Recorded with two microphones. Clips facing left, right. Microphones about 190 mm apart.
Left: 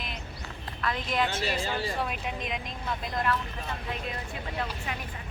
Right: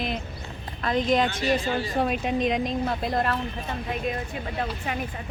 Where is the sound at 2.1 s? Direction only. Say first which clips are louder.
Right 10 dB; 35° right (ahead or behind).